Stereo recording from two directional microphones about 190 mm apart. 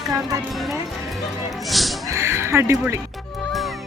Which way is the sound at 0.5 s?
Centre (ahead or behind).